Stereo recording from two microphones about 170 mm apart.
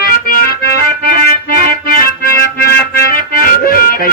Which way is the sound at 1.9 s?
60° left (ahead or behind).